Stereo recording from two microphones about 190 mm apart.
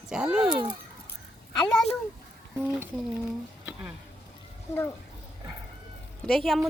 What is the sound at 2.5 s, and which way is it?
Speech, 10° right (ahead or behind).